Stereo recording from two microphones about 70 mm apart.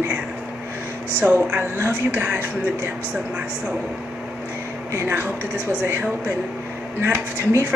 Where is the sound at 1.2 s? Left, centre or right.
Centre.